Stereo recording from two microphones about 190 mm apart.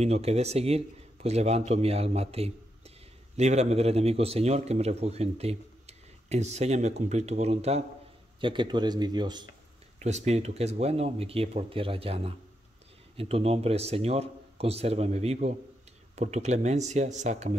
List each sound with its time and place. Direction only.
0.0 s a man's voice: 35° right (ahead or behind)
9.9 s a man's voice: 35° right (ahead or behind)